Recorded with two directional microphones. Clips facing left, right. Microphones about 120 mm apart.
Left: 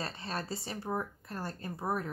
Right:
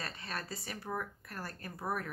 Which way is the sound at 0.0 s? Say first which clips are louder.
Left 4 dB; 30° left (ahead or behind).